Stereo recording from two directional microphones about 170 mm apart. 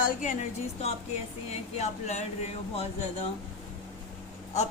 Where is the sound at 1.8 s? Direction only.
40° left (ahead or behind).